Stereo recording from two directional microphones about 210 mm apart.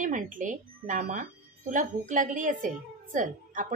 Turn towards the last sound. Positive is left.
turn(degrees=-40)  # may be behind; listen again after turning